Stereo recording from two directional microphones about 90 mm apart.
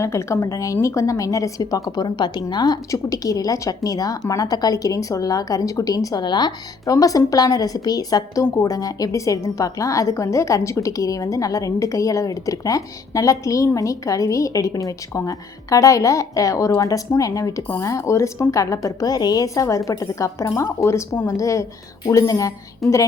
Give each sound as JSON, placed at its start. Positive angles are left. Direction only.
{"t": 0.0, "sound": "a woman's voice", "side_deg": 30}
{"t": 2.0, "sound": "a woman's voice", "side_deg": 50}
{"t": 2.9, "sound": "a woman's voice", "side_deg": 40}
{"t": 6.2, "sound": "speech", "side_deg": 55}
{"t": 6.8, "sound": "a woman's voice", "side_deg": 40}
{"t": 22.8, "sound": "a woman's voice", "side_deg": 0}